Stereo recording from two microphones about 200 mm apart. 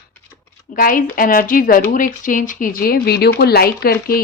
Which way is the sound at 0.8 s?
45° left (ahead or behind).